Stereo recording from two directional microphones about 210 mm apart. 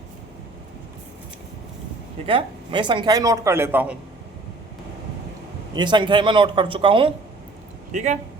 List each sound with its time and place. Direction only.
2.2 s speech: 25° right (ahead or behind); by 3.9 s 10° right (ahead or behind)
5.7 s a man's voice: 20° right (ahead or behind)
7.9 s speech: 35° right (ahead or behind)